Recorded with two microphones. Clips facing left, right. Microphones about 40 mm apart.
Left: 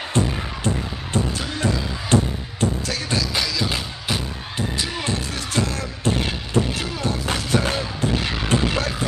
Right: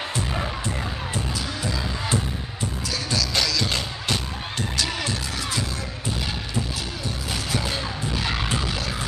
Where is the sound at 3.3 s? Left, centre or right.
Centre.